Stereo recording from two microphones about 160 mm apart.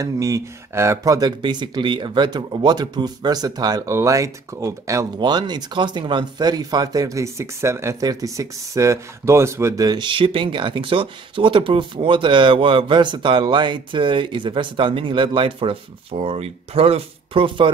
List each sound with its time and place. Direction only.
0.0 s speech: 20° right (ahead or behind)